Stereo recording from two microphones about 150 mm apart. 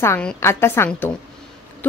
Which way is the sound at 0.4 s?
15° left (ahead or behind).